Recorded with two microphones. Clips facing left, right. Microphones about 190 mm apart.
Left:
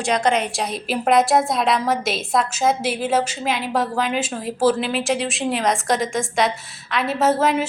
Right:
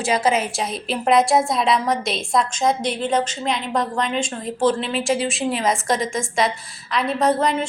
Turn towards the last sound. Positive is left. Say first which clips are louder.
# left 1 dB
turn(degrees=5)  # may be behind; listen again after turning